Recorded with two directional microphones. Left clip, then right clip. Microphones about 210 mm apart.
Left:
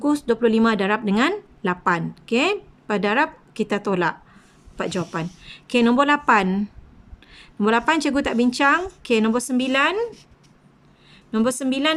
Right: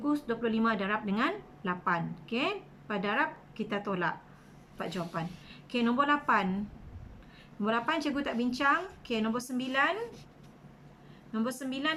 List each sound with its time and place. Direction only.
0.0 s a woman's voice: 50° left (ahead or behind)
11.3 s a woman's voice: 50° left (ahead or behind)